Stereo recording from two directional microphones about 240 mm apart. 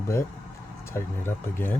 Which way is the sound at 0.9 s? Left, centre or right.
Centre.